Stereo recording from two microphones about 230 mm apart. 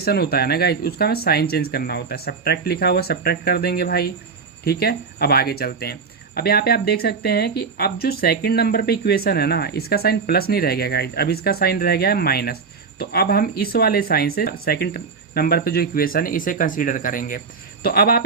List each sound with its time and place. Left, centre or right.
0.0 s speech: left